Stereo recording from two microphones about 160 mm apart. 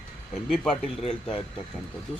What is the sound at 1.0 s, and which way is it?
Speech, 35° left (ahead or behind).